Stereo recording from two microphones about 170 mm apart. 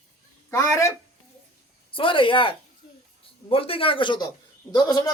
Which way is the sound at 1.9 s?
30° left (ahead or behind).